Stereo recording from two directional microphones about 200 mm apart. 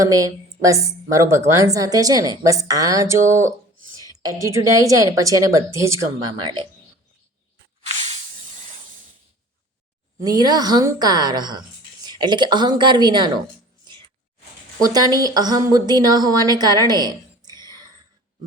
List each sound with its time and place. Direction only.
0.0 s a woman's voice: 15° right (ahead or behind)
7.8 s spray: 35° right (ahead or behind)
10.2 s a woman's voice: 20° right (ahead or behind)
14.8 s a woman's voice: 20° right (ahead or behind)